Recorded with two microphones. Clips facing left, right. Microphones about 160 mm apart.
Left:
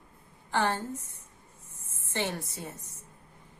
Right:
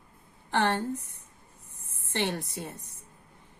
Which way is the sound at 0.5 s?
65° right (ahead or behind).